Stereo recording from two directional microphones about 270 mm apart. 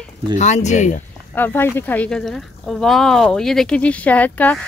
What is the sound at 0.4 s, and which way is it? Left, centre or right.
Speech, left.